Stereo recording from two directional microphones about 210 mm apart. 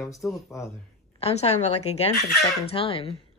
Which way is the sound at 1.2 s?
30° left (ahead or behind).